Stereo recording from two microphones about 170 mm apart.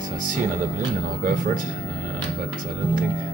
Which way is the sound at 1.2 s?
55° right (ahead or behind).